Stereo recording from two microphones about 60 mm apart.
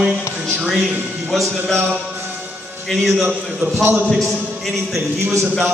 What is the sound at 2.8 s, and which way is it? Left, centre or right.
Speech, centre.